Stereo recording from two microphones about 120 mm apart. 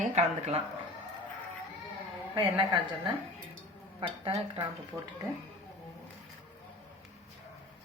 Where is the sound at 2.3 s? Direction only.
40° right (ahead or behind).